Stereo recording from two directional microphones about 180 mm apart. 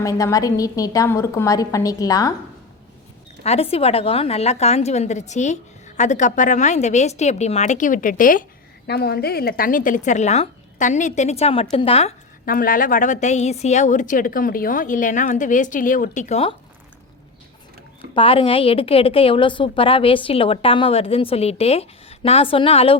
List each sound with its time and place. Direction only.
0.0 s a woman's voice: 20° left (ahead or behind)
3.4 s a woman's voice: 35° left (ahead or behind)
8.9 s a woman's voice: 60° left (ahead or behind); by 12.1 s 35° left (ahead or behind)
12.5 s a woman's voice: 50° left (ahead or behind); by 16.6 s 35° left (ahead or behind)
18.1 s a woman's voice: 30° left (ahead or behind)